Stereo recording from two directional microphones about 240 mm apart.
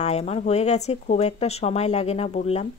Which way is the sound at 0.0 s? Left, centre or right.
Left.